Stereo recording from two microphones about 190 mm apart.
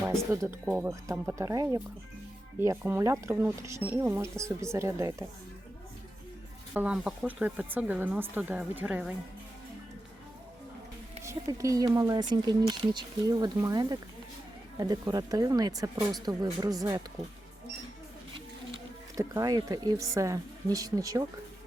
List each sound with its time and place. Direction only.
0.2 s speech: 15° right (ahead or behind)
6.7 s speech: 5° right (ahead or behind)
11.2 s speech: 15° right (ahead or behind)
18.3 s a sound: 25° right (ahead or behind)
19.2 s speech: 15° right (ahead or behind)